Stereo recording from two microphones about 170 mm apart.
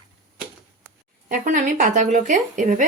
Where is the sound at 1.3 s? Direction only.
45° right (ahead or behind).